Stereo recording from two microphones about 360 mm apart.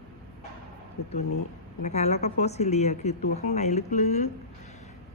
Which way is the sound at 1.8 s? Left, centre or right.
Centre.